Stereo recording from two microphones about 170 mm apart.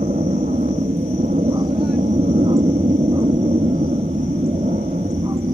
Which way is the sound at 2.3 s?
35° right (ahead or behind).